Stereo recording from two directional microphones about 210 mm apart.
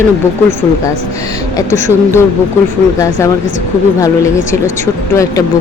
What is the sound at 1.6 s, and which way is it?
Speech, 15° left (ahead or behind).